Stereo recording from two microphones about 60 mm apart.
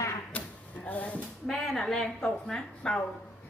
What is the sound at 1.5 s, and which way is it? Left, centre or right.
A woman's voice, centre.